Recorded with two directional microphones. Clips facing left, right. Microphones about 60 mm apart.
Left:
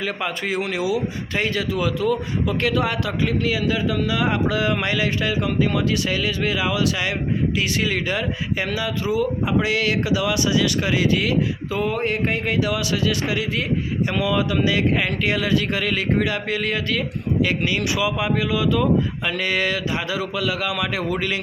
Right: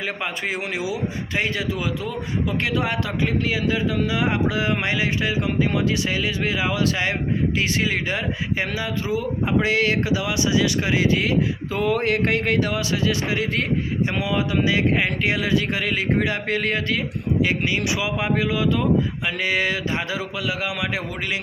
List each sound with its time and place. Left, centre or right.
0.0 s a man's voice: right
11.8 s a sound: right
12.7 s a man's voice: right
16.3 s speech: right
17.4 s a man's voice: right
19.2 s a man's voice: centre